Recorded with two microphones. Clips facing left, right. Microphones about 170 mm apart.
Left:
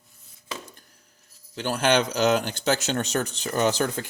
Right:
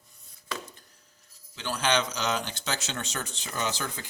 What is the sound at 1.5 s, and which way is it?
Speech, 55° left (ahead or behind).